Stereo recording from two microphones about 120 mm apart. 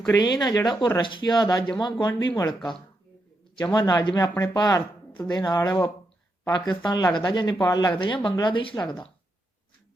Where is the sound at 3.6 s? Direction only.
40° left (ahead or behind).